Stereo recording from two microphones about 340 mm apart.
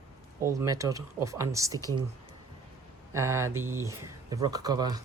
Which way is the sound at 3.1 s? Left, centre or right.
Centre.